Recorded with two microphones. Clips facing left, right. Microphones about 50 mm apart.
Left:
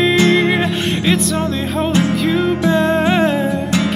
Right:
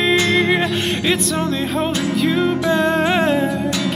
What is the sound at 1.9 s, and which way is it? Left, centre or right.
Music, left.